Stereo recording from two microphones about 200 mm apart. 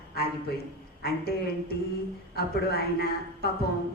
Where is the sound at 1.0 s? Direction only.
50° left (ahead or behind).